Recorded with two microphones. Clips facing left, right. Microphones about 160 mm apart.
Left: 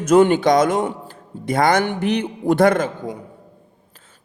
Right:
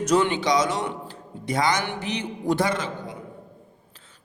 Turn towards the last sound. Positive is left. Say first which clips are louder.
# left 10 dB
turn(degrees=50)  # may be behind; listen again after turning